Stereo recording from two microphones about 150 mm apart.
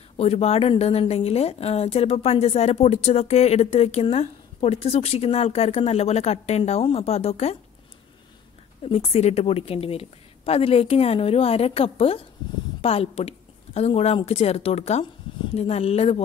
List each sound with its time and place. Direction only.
0.2 s a woman's voice: 45° left (ahead or behind)
8.8 s a woman's voice: 40° left (ahead or behind)